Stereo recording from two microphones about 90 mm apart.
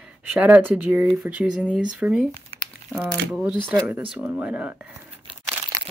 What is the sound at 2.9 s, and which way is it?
Speech, 20° left (ahead or behind).